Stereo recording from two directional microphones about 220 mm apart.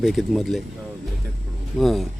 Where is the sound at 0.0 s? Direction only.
Centre (ahead or behind).